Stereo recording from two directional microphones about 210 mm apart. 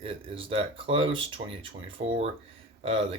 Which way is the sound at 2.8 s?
25° right (ahead or behind).